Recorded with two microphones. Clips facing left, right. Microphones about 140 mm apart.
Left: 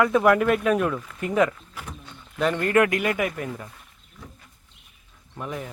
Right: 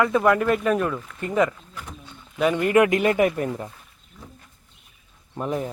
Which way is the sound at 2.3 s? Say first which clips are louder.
Right 2 dB; 10° right (ahead or behind).